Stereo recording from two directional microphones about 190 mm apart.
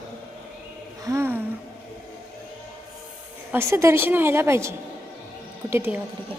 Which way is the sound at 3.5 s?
15° right (ahead or behind).